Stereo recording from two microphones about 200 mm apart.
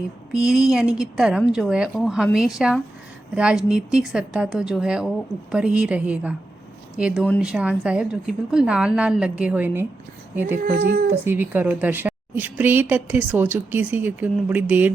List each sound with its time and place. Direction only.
0.4 s a woman's voice: 5° right (ahead or behind)
10.8 s speech: 50° right (ahead or behind)
11.3 s speech: 10° right (ahead or behind)